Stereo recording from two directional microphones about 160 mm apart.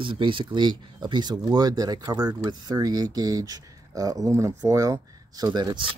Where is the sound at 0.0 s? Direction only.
30° right (ahead or behind).